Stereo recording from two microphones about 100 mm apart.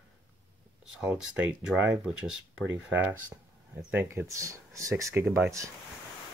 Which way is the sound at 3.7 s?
20° right (ahead or behind).